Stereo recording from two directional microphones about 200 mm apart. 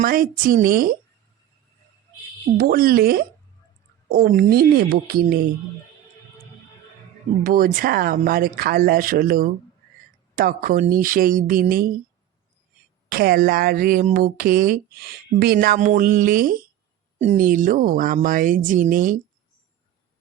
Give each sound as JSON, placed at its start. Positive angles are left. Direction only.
{"t": 0.0, "sound": "speech", "side_deg": -45}
{"t": 2.6, "sound": "speech", "side_deg": -45}
{"t": 7.4, "sound": "speech", "side_deg": -45}
{"t": 13.1, "sound": "speech", "side_deg": -50}